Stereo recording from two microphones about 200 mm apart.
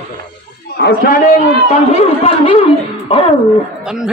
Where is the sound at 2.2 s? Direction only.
30° left (ahead or behind).